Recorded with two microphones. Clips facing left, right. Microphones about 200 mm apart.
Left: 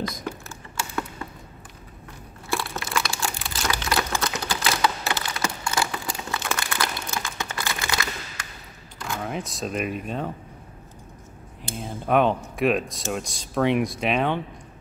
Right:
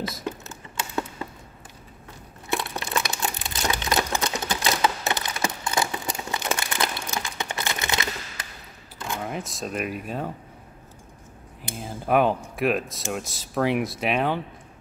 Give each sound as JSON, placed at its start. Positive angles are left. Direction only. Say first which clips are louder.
{"t": 0.2, "sound": "typing", "louder": "right 1 dB", "side_deg": -20}
{"t": 2.5, "sound": "crumpling", "louder": "even", "side_deg": -20}
{"t": 9.2, "sound": "speech", "louder": "left 3 dB", "side_deg": 0}
{"t": 11.7, "sound": "speech", "louder": "even", "side_deg": -5}